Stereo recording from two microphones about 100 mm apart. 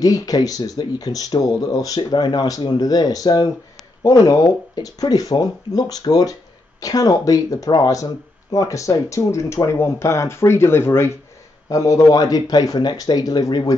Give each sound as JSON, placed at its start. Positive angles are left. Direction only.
{"t": 0.0, "sound": "speech", "side_deg": 40}